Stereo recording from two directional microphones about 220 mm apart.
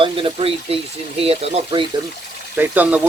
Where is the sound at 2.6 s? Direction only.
5° right (ahead or behind).